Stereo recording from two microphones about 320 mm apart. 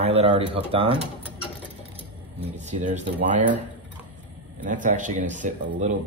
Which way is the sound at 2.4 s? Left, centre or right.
Right.